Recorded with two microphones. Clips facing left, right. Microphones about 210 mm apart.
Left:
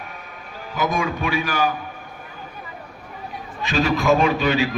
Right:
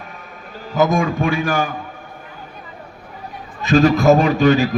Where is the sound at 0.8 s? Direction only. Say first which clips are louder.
Right 6 dB; 45° right (ahead or behind).